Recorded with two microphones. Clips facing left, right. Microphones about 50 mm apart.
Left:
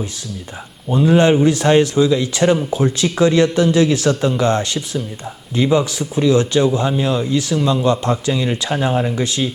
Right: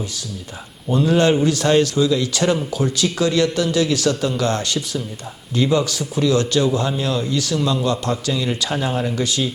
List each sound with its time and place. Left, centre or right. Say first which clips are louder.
0.9 s a man's voice: left 3 dB; centre